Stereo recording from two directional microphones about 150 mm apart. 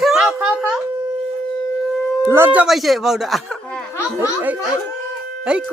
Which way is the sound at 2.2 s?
15° right (ahead or behind).